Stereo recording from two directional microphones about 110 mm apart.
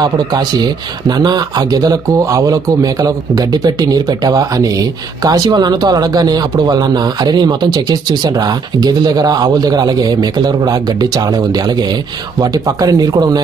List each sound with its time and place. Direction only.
0.0 s a man's voice: 40° right (ahead or behind)